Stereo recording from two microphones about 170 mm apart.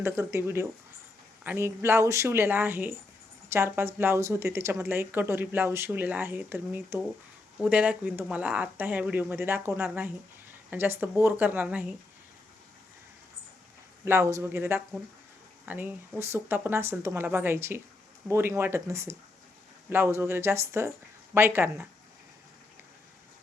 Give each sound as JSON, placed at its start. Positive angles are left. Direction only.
{"t": 0.0, "sound": "a woman's voice", "side_deg": -15}
{"t": 14.0, "sound": "a woman's voice", "side_deg": -15}